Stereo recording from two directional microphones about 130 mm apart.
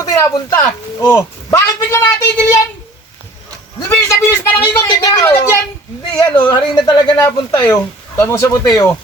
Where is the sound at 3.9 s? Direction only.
20° left (ahead or behind).